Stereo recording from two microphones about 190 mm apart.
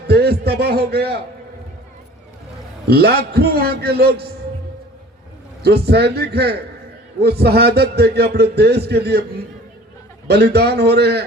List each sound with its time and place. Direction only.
0.1 s a sound: 55° right (ahead or behind)
2.8 s a man's voice: 55° right (ahead or behind)
5.6 s a man's voice: 60° right (ahead or behind)
10.2 s a man's voice: 60° right (ahead or behind)